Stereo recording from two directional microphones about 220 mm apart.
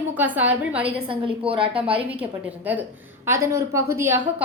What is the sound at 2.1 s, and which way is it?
A woman's voice, 5° right (ahead or behind).